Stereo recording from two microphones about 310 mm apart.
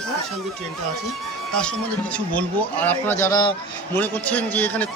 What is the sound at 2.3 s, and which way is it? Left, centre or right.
A man's voice, centre.